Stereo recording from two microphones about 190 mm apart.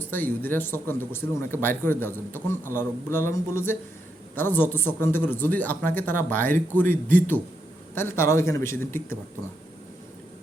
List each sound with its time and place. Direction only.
0.0 s a man's voice: 10° left (ahead or behind)